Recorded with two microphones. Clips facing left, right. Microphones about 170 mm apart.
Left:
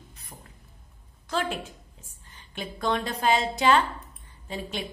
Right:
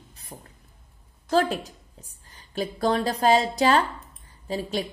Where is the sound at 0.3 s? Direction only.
20° right (ahead or behind).